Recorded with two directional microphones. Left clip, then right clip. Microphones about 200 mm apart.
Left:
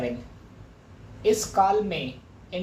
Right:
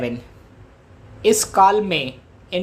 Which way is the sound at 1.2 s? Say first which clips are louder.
Right 7 dB; 45° right (ahead or behind).